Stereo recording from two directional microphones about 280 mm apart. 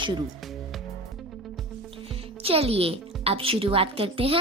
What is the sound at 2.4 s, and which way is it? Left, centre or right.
A woman's voice, right.